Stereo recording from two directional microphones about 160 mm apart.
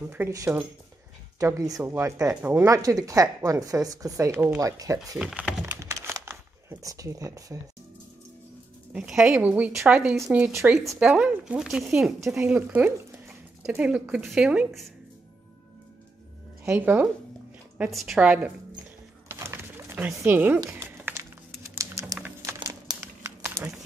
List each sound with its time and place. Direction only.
0.0 s a woman's voice: 10° right (ahead or behind)
5.2 s speech: 5° right (ahead or behind)
5.8 s crumpling: 20° right (ahead or behind)
8.9 s a woman's voice: 5° right (ahead or behind)
10.8 s a woman's voice: 5° right (ahead or behind)
16.6 s a woman's voice: 10° right (ahead or behind)
19.2 s pigeon: 15° right (ahead or behind)
20.2 s crumpling: 10° right (ahead or behind)